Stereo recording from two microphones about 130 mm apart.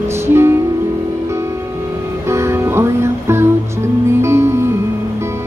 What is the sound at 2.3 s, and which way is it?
Music, 20° right (ahead or behind).